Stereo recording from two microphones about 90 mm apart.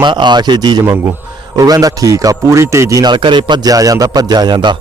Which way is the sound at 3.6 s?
40° right (ahead or behind).